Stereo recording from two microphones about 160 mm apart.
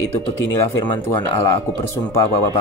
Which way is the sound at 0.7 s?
20° left (ahead or behind).